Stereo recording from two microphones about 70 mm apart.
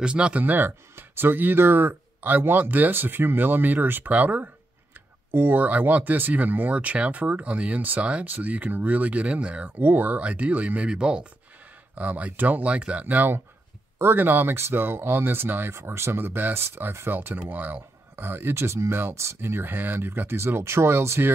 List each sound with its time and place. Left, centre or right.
0.0 s speech: centre; by 21.3 s right